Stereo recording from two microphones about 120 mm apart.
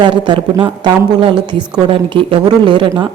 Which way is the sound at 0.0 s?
45° right (ahead or behind).